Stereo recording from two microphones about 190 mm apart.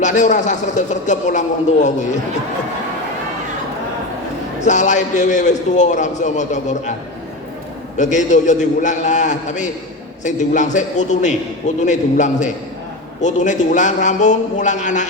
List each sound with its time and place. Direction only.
0.0 s a man's voice: 40° left (ahead or behind)
4.6 s a man's voice: 40° left (ahead or behind)
7.9 s a man's voice: 40° left (ahead or behind)